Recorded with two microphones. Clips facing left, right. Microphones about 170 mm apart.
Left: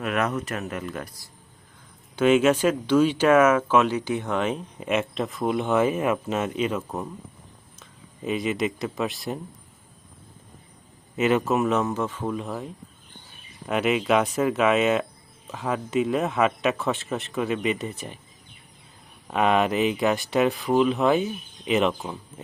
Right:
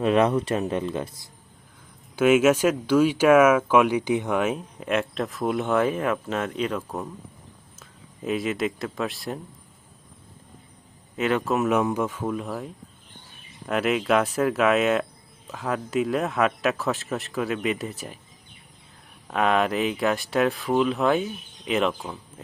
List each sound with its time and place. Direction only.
0.0 s speech: 30° right (ahead or behind)
2.1 s speech: 5° right (ahead or behind)
11.2 s speech: 5° left (ahead or behind)
11.7 s speech: 10° right (ahead or behind)
19.3 s speech: centre (ahead or behind)